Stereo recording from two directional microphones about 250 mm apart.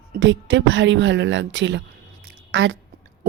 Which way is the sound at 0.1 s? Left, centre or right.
Right.